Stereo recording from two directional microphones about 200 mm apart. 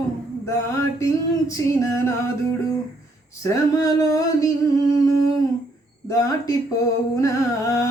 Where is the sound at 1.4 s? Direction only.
15° left (ahead or behind).